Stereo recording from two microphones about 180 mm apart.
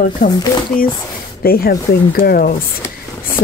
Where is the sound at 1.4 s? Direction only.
55° left (ahead or behind).